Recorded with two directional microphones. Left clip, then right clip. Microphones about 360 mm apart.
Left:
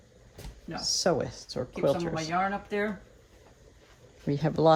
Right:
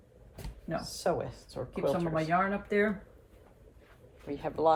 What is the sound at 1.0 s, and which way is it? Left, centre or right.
Speech, left.